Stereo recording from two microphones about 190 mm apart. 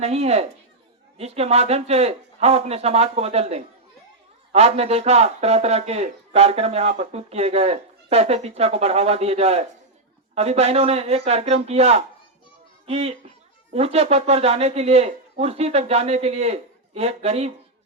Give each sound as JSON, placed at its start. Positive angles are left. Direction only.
{"t": 0.0, "sound": "speech", "side_deg": -35}